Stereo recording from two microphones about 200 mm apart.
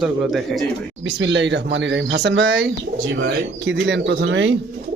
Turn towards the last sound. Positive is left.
turn(degrees=-65)  # may be behind; listen again after turning